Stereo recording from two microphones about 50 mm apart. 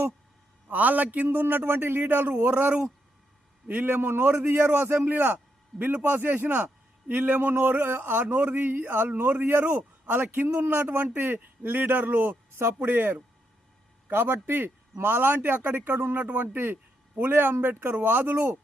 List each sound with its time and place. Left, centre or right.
0.7 s a man's voice: right
12.5 s a man's voice: right
16.2 s speech: right
17.2 s speech: right